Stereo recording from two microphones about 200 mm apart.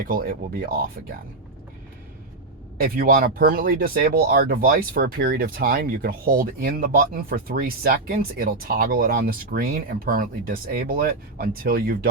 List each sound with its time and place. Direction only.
0.0 s speech: 45° right (ahead or behind)
2.8 s speech: 50° right (ahead or behind)